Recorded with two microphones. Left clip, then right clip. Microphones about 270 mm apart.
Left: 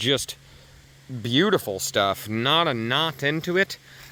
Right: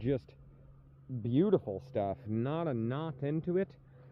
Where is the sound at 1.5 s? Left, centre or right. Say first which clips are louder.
Left 8 dB; left.